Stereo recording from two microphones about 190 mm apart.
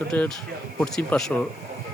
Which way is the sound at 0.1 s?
5° left (ahead or behind).